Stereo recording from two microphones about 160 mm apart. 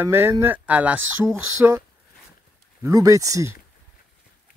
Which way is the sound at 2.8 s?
20° right (ahead or behind).